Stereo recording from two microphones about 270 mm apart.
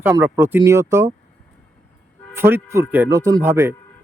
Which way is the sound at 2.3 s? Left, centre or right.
Centre.